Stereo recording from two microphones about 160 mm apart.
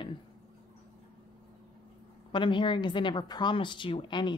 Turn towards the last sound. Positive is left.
turn(degrees=30)  # may be behind; listen again after turning